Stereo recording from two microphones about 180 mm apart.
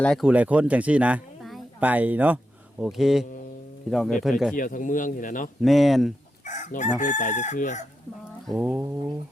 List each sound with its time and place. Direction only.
0.0 s speech: 5° left (ahead or behind)
0.3 s speech: 10° right (ahead or behind)
4.5 s chicken: 45° left (ahead or behind)
5.6 s speech: centre (ahead or behind)
6.4 s chicken: 45° left (ahead or behind)
8.4 s a sound: 10° right (ahead or behind)